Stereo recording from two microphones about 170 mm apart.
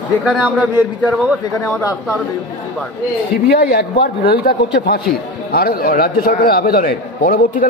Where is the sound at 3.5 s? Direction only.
75° left (ahead or behind); by 7.6 s 55° left (ahead or behind).